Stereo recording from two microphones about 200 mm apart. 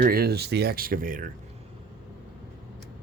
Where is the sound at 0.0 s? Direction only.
50° right (ahead or behind).